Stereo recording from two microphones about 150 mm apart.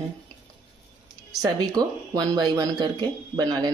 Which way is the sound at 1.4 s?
25° right (ahead or behind).